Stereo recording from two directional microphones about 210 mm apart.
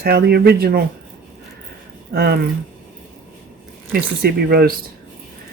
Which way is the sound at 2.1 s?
50° right (ahead or behind).